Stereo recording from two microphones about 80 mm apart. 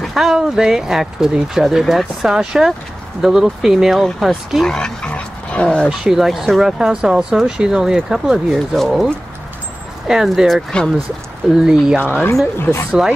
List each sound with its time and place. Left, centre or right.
0.0 s speech: centre
4.6 s speech: centre
5.9 s speech: centre
12.0 s speech: left
13.0 s speech: centre